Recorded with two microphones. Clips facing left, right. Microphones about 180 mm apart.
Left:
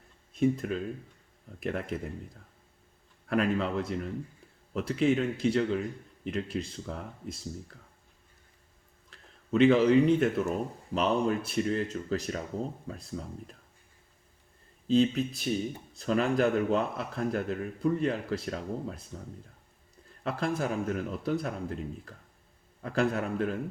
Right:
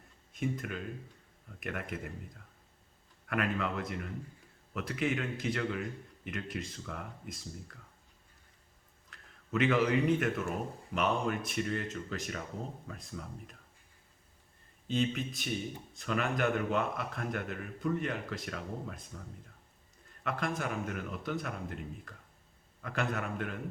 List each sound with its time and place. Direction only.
0.3 s a man's voice: 30° left (ahead or behind)
3.2 s a man's voice: 30° left (ahead or behind)
9.0 s a man's voice: 30° left (ahead or behind)
14.8 s a man's voice: 35° left (ahead or behind)
20.2 s a man's voice: 30° left (ahead or behind)